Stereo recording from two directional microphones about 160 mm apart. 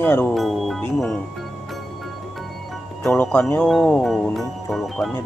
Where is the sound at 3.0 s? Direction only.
10° left (ahead or behind).